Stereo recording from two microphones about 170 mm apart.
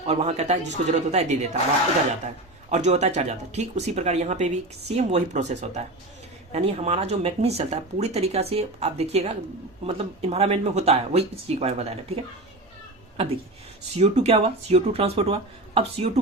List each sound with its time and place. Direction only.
0.0 s speech: 35° right (ahead or behind)
13.9 s speech: 40° right (ahead or behind)